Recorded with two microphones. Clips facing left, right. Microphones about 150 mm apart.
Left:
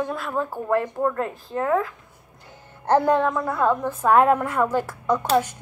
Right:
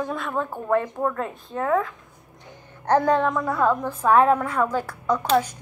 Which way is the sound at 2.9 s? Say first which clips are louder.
Left 1 dB; 10° left (ahead or behind).